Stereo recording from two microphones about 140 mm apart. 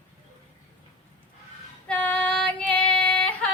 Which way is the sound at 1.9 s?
10° left (ahead or behind).